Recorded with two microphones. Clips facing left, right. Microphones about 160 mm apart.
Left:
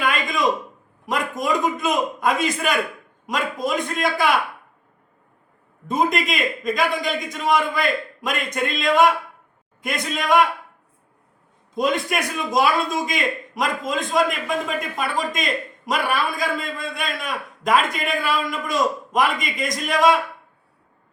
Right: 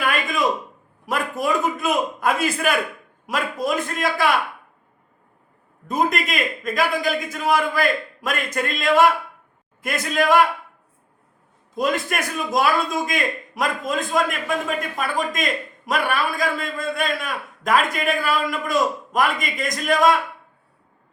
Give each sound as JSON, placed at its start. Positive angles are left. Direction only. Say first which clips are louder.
{"t": 0.0, "sound": "a sound", "louder": "even", "side_deg": -5}
{"t": 1.0, "sound": "a man's voice", "louder": "even", "side_deg": -5}
{"t": 5.9, "sound": "a man's voice", "louder": "left 1 dB", "side_deg": 0}
{"t": 11.7, "sound": "a man's voice", "louder": "left 1 dB", "side_deg": 0}